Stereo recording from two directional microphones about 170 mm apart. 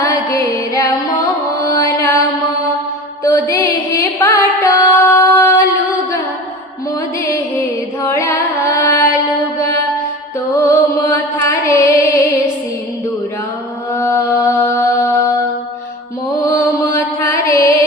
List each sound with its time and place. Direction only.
0.0 s music: 20° left (ahead or behind)
3.2 s music: 20° left (ahead or behind)
8.0 s music: 15° left (ahead or behind)
10.7 s mantra: 15° left (ahead or behind)
13.9 s mantra: 15° left (ahead or behind)
16.5 s mantra: 20° left (ahead or behind)